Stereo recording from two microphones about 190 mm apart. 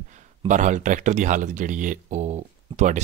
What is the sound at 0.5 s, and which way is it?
Speech, 40° right (ahead or behind).